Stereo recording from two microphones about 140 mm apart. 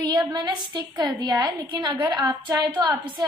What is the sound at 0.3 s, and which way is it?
A woman's voice, 30° right (ahead or behind).